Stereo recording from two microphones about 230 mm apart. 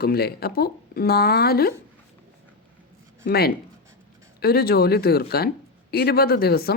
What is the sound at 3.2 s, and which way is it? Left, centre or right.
Speech, left.